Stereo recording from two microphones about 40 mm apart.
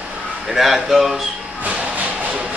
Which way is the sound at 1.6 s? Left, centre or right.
Right.